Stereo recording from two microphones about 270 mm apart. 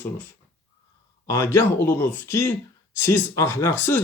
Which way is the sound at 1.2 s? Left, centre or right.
Centre.